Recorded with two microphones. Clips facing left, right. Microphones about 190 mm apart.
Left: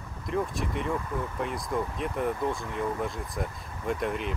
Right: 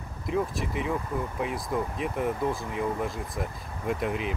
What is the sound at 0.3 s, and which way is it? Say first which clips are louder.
Speech: right 1 dB; centre (ahead or behind).